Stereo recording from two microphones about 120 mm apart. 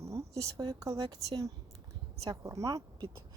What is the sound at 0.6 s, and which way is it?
A woman's voice, 30° right (ahead or behind).